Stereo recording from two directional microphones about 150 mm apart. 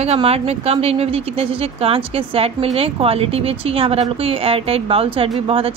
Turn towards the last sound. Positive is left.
turn(degrees=-40)  # may be behind; listen again after turning